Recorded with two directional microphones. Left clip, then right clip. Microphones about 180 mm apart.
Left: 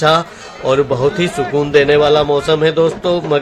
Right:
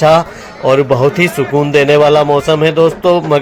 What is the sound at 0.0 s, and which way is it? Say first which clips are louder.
A man's voice: right 4 dB; 25° right (ahead or behind).